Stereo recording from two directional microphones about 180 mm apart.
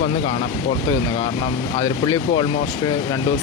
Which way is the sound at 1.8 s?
20° left (ahead or behind).